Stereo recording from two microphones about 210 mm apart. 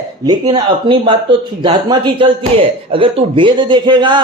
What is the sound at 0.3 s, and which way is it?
A man's voice, 20° right (ahead or behind).